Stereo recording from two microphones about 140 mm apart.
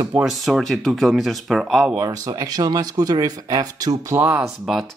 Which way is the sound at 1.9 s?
25° right (ahead or behind).